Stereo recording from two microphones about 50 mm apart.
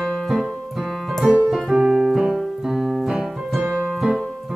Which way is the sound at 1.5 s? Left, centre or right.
Centre.